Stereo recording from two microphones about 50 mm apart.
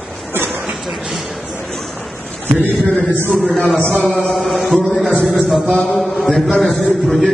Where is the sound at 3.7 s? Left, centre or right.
Left.